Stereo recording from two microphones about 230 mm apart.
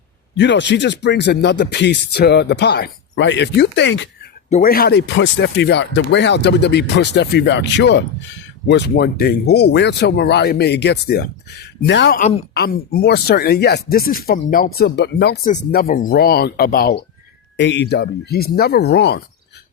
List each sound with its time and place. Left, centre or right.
0.3 s speech: left
4.4 s speech: left
17.6 s speech: left